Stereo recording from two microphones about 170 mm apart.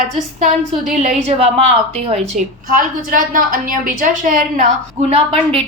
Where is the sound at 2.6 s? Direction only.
55° right (ahead or behind).